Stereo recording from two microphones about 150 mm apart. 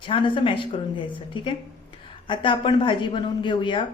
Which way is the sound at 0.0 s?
35° left (ahead or behind).